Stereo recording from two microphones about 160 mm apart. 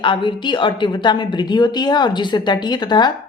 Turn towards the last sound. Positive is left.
turn(degrees=25)  # may be behind; listen again after turning